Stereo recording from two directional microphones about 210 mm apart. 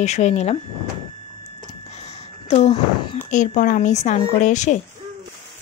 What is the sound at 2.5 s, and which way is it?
Speech, 30° left (ahead or behind).